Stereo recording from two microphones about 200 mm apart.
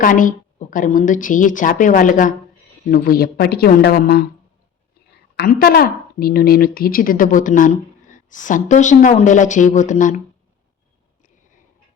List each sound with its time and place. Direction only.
0.0 s speech: 40° left (ahead or behind)
5.4 s speech: 50° left (ahead or behind)